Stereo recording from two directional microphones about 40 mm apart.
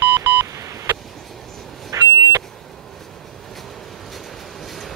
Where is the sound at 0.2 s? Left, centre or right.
Right.